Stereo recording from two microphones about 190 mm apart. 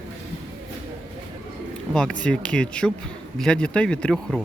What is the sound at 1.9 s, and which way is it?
Speech, 5° left (ahead or behind).